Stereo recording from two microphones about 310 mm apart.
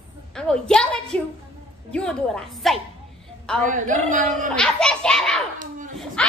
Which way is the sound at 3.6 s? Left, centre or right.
Right.